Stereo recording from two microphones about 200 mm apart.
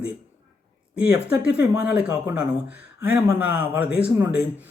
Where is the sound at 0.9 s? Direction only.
5° right (ahead or behind).